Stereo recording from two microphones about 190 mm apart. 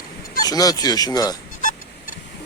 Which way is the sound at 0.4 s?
20° left (ahead or behind).